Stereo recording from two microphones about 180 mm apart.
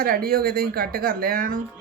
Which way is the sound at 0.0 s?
55° right (ahead or behind).